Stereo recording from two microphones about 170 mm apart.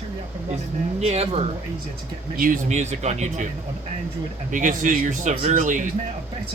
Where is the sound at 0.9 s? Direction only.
40° right (ahead or behind).